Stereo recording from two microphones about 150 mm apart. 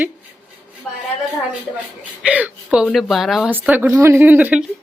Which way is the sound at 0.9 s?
5° left (ahead or behind).